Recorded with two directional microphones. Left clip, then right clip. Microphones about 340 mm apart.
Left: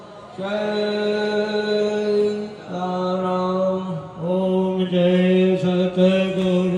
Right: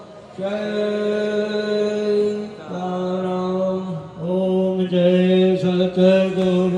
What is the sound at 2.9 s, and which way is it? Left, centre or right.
Mantra, centre.